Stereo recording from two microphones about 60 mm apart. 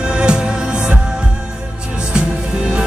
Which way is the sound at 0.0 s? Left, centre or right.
Centre.